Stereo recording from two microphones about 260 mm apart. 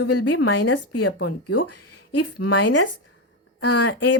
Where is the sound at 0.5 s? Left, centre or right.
Left.